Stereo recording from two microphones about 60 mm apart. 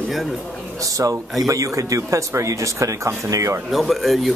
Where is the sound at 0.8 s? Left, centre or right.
Right.